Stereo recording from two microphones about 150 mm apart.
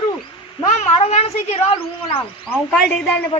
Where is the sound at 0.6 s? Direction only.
45° left (ahead or behind).